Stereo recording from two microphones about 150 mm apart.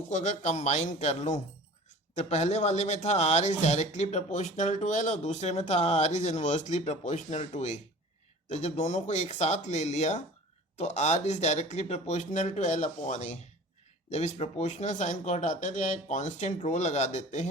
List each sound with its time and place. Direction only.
0.1 s speech: 50° left (ahead or behind)